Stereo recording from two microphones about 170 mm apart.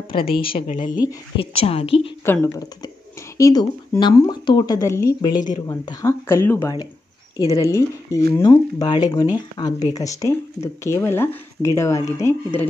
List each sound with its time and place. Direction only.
0.3 s speech: 30° left (ahead or behind)
2.2 s a woman's voice: 15° left (ahead or behind)